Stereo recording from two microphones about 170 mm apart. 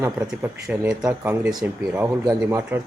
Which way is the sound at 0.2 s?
10° right (ahead or behind).